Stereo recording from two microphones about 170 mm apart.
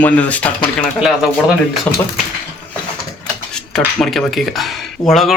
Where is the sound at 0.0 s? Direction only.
10° left (ahead or behind).